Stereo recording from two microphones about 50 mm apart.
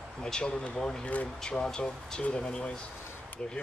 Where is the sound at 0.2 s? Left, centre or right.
Centre.